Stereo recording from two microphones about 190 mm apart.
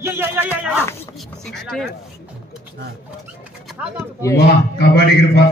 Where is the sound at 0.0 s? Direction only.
10° right (ahead or behind).